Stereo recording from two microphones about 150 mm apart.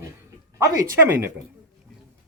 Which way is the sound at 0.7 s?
15° right (ahead or behind).